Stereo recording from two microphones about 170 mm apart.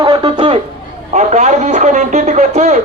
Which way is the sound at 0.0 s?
25° right (ahead or behind).